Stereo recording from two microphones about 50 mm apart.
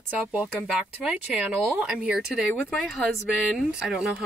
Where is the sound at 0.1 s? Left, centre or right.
Right.